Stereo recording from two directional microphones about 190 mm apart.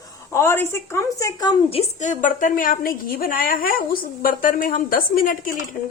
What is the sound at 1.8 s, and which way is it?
A woman's voice, 40° left (ahead or behind).